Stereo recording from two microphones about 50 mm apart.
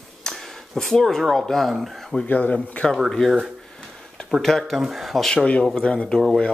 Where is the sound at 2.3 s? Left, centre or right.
Left.